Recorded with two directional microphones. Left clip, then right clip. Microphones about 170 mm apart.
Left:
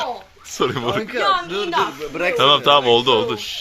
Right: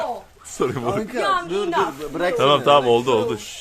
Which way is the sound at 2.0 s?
10° right (ahead or behind).